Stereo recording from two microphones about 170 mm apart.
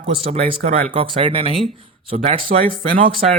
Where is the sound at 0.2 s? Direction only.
35° right (ahead or behind).